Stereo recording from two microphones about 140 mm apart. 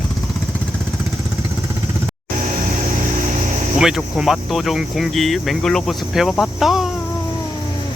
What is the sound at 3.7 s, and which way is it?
Speech, 5° right (ahead or behind).